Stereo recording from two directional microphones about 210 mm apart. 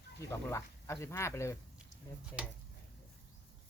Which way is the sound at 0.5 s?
15° left (ahead or behind).